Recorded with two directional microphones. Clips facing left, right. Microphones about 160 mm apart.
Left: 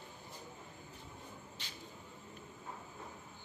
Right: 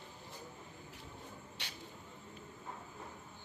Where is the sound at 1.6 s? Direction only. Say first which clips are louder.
Right 2 dB; 70° right (ahead or behind).